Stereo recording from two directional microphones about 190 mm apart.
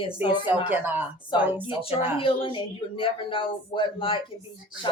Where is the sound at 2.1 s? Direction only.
30° left (ahead or behind).